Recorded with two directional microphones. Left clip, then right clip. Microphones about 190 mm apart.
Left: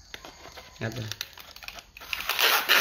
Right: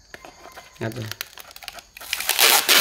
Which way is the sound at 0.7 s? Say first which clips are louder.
Right 4 dB; 50° right (ahead or behind).